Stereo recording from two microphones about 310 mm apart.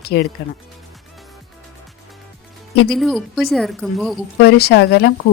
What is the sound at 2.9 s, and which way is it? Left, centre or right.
A woman's voice, centre.